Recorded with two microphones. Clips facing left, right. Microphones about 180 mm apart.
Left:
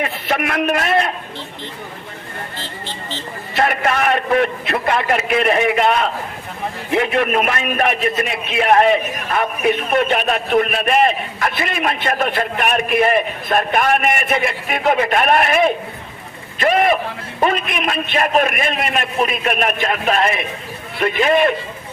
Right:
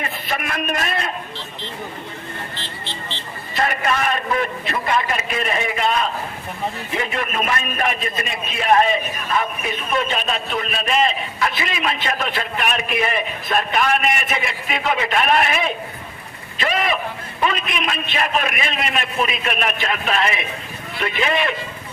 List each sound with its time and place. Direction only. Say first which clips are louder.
0.0 s a man's voice: left 6 dB; 65° left (ahead or behind)
2.8 s vehicle: left 4 dB; 45° left (ahead or behind)
3.5 s a man's voice: left 3 dB; 60° left (ahead or behind)